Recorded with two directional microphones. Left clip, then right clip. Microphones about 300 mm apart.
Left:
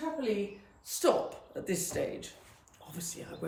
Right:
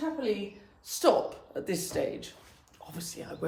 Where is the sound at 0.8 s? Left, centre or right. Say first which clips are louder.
Right 3 dB; centre.